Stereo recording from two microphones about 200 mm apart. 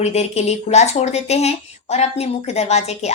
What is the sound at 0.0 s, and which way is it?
Speech, 35° left (ahead or behind).